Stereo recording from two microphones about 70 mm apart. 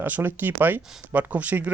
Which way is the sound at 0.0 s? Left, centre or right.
Right.